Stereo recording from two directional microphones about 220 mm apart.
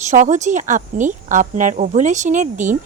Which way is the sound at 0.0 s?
35° right (ahead or behind).